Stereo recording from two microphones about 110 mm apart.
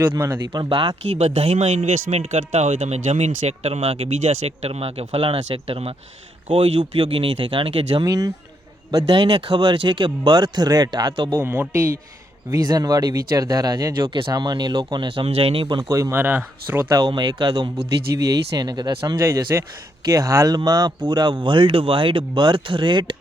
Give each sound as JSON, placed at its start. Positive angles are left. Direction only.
{"t": 0.4, "sound": "speech", "side_deg": -40}
{"t": 1.2, "sound": "speech", "side_deg": -75}
{"t": 6.7, "sound": "speech", "side_deg": -50}
{"t": 8.0, "sound": "speech", "side_deg": -30}
{"t": 9.1, "sound": "speech", "side_deg": -45}
{"t": 11.3, "sound": "speech", "side_deg": -20}
{"t": 12.5, "sound": "speech", "side_deg": -35}
{"t": 13.9, "sound": "speech", "side_deg": -45}
{"t": 15.8, "sound": "speech", "side_deg": -25}
{"t": 17.1, "sound": "speech", "side_deg": -40}
{"t": 17.5, "sound": "speech", "side_deg": -55}
{"t": 18.3, "sound": "speech", "side_deg": -40}
{"t": 19.2, "sound": "speech", "side_deg": -25}